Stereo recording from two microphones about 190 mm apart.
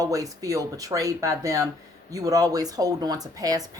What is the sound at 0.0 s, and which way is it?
Speech, 15° right (ahead or behind).